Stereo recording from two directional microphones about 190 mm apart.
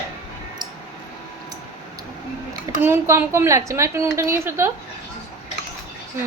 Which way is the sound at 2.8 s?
15° right (ahead or behind).